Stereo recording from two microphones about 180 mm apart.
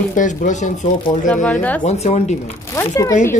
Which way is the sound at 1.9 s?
40° left (ahead or behind).